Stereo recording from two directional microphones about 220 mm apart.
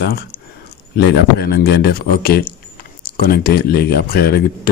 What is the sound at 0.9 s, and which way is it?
Speech, 45° left (ahead or behind).